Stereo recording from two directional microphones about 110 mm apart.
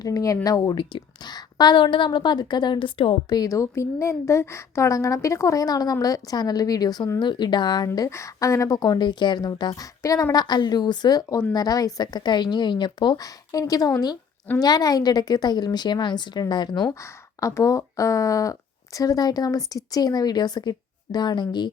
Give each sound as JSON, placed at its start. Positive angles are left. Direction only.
{"t": 0.0, "sound": "a woman's voice", "side_deg": 30}
{"t": 7.9, "sound": "a woman's voice", "side_deg": 30}
{"t": 10.3, "sound": "a woman's voice", "side_deg": 40}
{"t": 16.9, "sound": "a woman's voice", "side_deg": 25}